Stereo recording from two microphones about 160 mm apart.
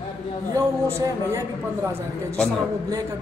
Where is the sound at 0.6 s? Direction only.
20° right (ahead or behind).